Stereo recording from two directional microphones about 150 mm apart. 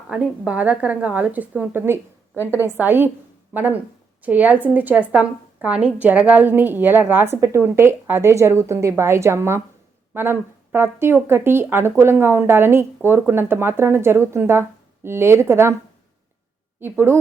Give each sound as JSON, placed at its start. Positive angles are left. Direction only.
{"t": 0.1, "sound": "a woman's voice", "side_deg": -10}